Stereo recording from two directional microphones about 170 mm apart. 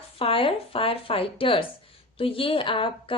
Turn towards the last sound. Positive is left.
turn(degrees=30)  # may be behind; listen again after turning